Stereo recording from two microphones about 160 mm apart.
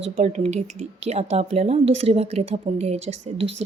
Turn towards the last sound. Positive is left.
turn(degrees=-40)  # may be behind; listen again after turning